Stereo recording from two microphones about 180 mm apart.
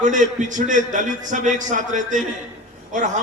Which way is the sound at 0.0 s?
45° right (ahead or behind).